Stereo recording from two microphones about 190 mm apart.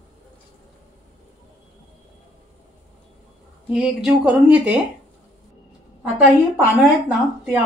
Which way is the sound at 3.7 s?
5° right (ahead or behind).